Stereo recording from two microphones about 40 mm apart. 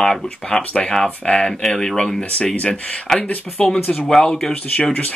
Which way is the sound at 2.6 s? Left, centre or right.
Left.